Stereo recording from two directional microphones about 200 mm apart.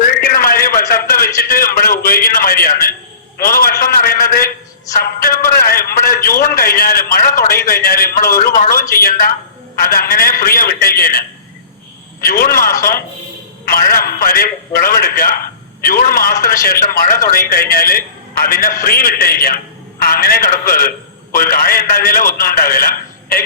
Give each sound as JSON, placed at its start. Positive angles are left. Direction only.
{"t": 0.0, "sound": "a sound", "side_deg": 45}
{"t": 3.3, "sound": "a man's voice", "side_deg": 45}
{"t": 12.2, "sound": "a man's voice", "side_deg": 45}